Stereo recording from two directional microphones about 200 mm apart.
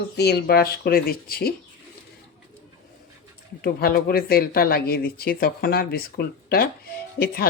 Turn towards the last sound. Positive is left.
turn(degrees=50)  # may be behind; listen again after turning